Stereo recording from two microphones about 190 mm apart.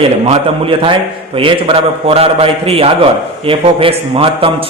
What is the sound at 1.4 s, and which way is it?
A man's voice, 30° right (ahead or behind).